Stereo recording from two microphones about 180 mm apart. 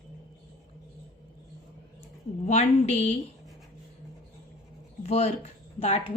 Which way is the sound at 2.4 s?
40° left (ahead or behind).